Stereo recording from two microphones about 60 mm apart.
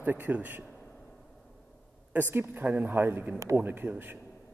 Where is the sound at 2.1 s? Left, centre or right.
Right.